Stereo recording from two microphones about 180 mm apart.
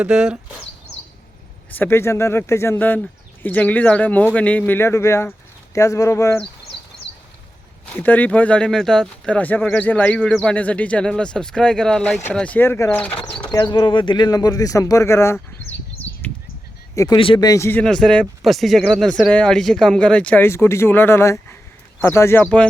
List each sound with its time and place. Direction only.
0.0 s speech: 5° right (ahead or behind)
1.7 s speech: 10° left (ahead or behind)
7.9 s speech: 10° left (ahead or behind)
13.5 s speech: 25° left (ahead or behind)
15.9 s a sound: 10° left (ahead or behind)
16.9 s speech: 20° left (ahead or behind)
17.2 s speech: 30° left (ahead or behind); by 22.6 s 10° left (ahead or behind)